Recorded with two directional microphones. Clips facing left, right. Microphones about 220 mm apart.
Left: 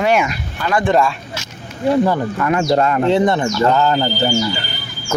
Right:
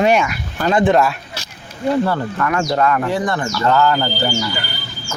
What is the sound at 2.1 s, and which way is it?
Speech, 15° left (ahead or behind).